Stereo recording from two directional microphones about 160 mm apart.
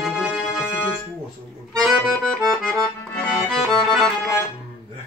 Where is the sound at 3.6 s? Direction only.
Centre (ahead or behind).